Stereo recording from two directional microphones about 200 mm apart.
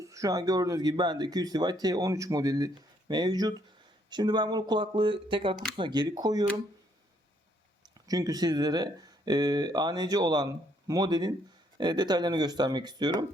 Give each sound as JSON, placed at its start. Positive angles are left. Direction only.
{"t": 0.0, "sound": "speech", "side_deg": -15}
{"t": 7.9, "sound": "speech", "side_deg": -20}